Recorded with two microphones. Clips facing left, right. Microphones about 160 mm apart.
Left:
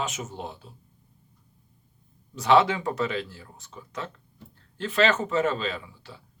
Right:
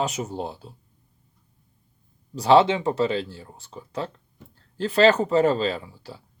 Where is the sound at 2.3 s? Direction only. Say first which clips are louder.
Right 4 dB; 35° right (ahead or behind).